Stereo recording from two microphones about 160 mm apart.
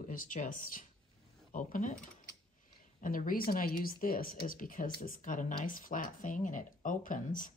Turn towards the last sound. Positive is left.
turn(degrees=55)  # may be behind; listen again after turning